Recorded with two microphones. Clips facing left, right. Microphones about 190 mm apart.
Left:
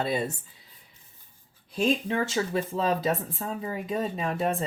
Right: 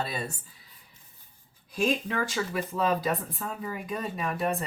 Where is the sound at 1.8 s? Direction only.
25° left (ahead or behind).